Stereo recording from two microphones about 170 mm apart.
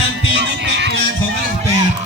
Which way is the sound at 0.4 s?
85° right.